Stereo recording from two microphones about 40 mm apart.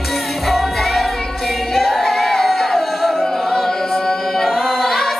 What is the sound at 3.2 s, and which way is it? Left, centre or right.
A capella, centre.